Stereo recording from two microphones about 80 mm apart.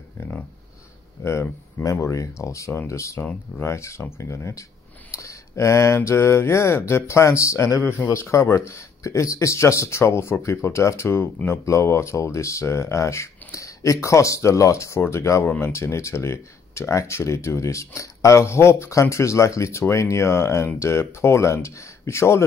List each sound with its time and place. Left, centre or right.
1.2 s speech: left